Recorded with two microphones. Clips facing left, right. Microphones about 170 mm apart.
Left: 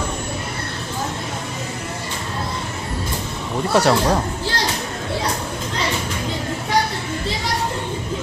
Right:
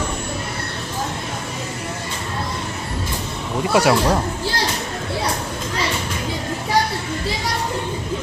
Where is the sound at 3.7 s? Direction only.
10° right (ahead or behind).